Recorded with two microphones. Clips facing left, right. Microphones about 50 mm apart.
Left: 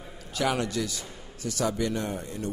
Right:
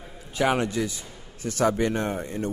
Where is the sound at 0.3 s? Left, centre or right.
Right.